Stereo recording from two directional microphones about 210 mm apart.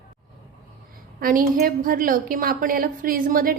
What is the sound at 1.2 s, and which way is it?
A woman's voice, 40° right (ahead or behind).